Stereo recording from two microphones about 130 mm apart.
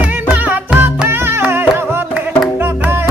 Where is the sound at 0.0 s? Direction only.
10° right (ahead or behind).